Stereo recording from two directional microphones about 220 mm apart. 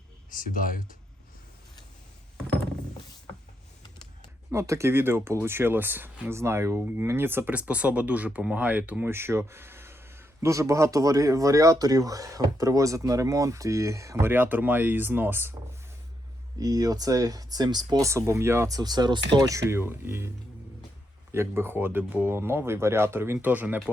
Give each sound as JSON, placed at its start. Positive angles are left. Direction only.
{"t": 0.3, "sound": "speech", "side_deg": 40}
{"t": 4.5, "sound": "speech", "side_deg": -15}
{"t": 16.6, "sound": "speech", "side_deg": -15}
{"t": 21.3, "sound": "speech", "side_deg": -10}